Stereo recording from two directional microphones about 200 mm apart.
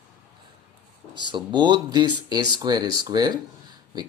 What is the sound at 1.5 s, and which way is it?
Speech, 20° right (ahead or behind).